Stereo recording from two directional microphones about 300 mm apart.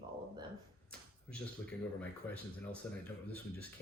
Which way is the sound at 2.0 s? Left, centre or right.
Centre.